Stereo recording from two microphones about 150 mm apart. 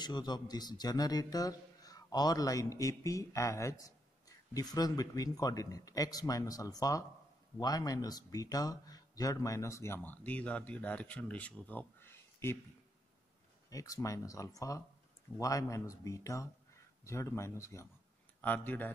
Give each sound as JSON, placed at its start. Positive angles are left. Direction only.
{"t": 0.0, "sound": "speech", "side_deg": 30}
{"t": 13.7, "sound": "speech", "side_deg": 20}